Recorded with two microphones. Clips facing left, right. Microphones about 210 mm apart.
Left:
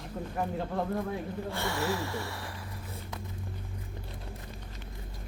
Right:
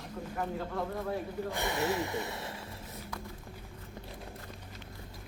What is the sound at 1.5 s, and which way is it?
Speech, 20° right (ahead or behind).